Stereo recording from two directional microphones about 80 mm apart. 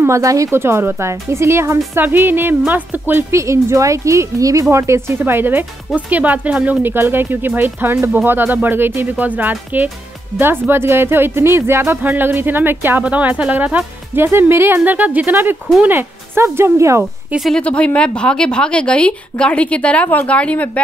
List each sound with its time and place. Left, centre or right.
0.0 s speech: right
0.6 s speech: right
3.3 s speech: right
17.6 s a woman's voice: centre